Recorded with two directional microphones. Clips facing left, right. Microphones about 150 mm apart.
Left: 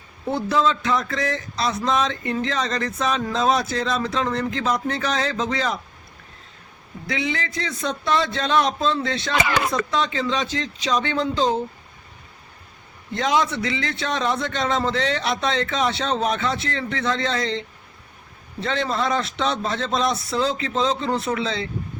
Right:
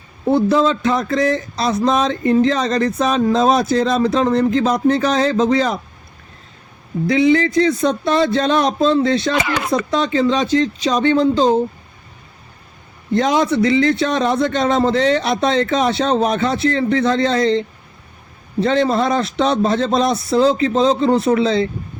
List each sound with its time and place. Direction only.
0.3 s speech: 35° right (ahead or behind)
7.1 s speech: 40° right (ahead or behind)
13.1 s speech: 45° right (ahead or behind)